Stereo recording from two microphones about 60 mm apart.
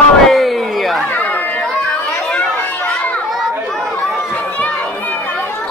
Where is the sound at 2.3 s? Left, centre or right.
Left.